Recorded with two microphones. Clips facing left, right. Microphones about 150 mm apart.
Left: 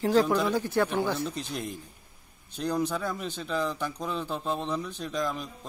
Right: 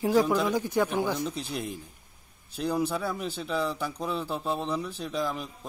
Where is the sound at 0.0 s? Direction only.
10° right (ahead or behind).